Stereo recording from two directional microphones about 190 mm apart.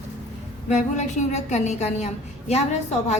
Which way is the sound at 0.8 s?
35° left (ahead or behind).